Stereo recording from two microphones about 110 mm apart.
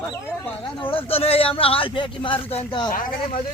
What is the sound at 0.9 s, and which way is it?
Speech, 60° left (ahead or behind).